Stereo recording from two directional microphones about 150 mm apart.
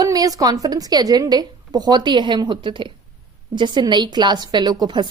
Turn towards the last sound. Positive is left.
turn(degrees=-30)  # may be behind; listen again after turning